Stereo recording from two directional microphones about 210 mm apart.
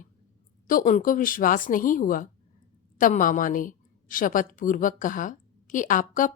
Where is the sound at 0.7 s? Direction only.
40° left (ahead or behind).